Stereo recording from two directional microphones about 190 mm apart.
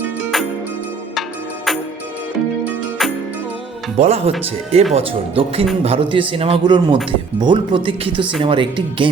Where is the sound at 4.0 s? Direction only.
35° right (ahead or behind).